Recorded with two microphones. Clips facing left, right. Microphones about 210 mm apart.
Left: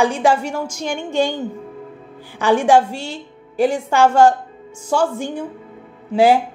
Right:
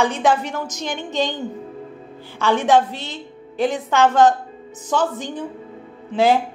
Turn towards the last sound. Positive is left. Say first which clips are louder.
# left 3 dB
turn(degrees=15)  # may be behind; listen again after turning